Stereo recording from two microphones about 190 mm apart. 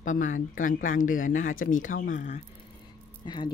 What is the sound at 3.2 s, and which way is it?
Speech, 25° left (ahead or behind).